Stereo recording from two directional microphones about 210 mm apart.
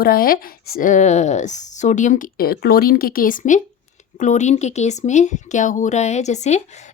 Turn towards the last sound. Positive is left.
turn(degrees=35)  # may be behind; listen again after turning